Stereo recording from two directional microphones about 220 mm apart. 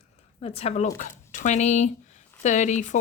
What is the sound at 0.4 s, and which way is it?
Speech, 30° left (ahead or behind).